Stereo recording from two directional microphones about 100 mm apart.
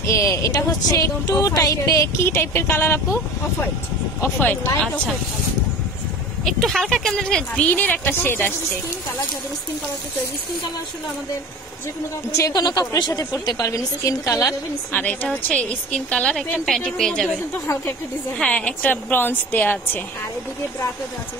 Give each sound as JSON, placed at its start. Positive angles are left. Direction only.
{"t": 0.0, "sound": "speech", "side_deg": 30}
{"t": 6.4, "sound": "speech", "side_deg": 0}
{"t": 12.3, "sound": "speech", "side_deg": 35}
{"t": 14.9, "sound": "speech", "side_deg": 15}
{"t": 18.4, "sound": "speech", "side_deg": 15}